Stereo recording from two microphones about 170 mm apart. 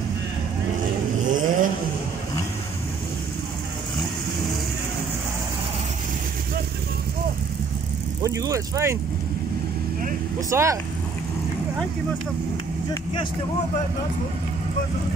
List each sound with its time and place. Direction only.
1.3 s vehicle: 50° right (ahead or behind)
8.2 s speech: 20° right (ahead or behind)
10.5 s speech: 15° right (ahead or behind)